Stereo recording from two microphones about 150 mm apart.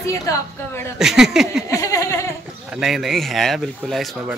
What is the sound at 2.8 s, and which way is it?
Speech, centre (ahead or behind).